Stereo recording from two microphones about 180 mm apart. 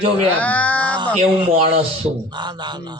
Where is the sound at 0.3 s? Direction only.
10° left (ahead or behind).